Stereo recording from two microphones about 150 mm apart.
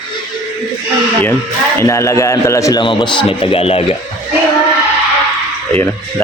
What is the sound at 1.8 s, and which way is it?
A man's voice, 20° left (ahead or behind).